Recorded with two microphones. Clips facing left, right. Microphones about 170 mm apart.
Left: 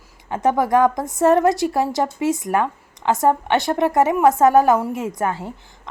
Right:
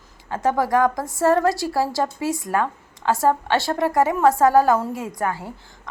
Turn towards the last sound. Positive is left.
turn(degrees=20)  # may be behind; listen again after turning